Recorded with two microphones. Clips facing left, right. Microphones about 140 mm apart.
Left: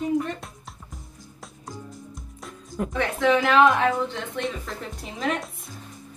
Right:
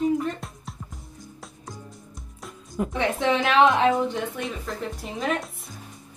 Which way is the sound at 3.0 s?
20° right (ahead or behind).